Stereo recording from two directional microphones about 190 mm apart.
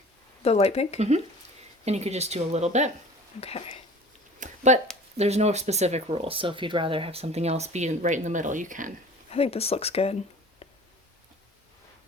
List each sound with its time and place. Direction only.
0.4 s speech: 35° left (ahead or behind)
0.9 s speech: 35° right (ahead or behind)
3.4 s speech: 30° left (ahead or behind)
4.4 s a sound: 40° right (ahead or behind)
5.1 s speech: 35° right (ahead or behind)
9.3 s speech: 30° left (ahead or behind)